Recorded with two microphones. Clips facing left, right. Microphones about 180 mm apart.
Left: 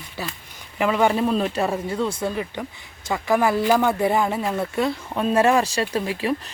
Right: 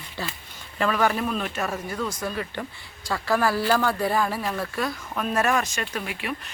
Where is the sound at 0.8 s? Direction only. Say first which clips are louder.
Left 4 dB; 20° left (ahead or behind).